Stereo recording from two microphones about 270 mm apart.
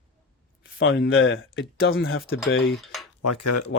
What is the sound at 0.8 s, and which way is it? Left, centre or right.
Speech, left.